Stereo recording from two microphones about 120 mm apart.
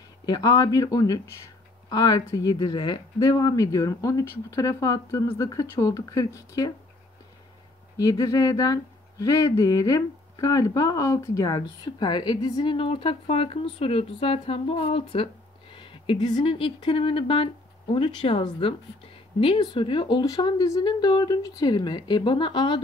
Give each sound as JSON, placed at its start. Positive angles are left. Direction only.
{"t": 0.3, "sound": "speech", "side_deg": 35}
{"t": 8.0, "sound": "speech", "side_deg": 30}
{"t": 12.7, "sound": "speech", "side_deg": 50}